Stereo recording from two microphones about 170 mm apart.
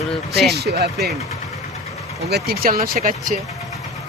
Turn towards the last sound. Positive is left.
turn(degrees=-55)  # may be behind; listen again after turning